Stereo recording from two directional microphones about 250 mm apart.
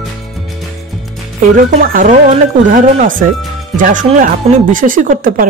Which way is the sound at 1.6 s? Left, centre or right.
Right.